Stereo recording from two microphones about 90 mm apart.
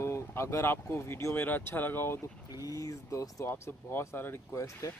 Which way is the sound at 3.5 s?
25° left (ahead or behind).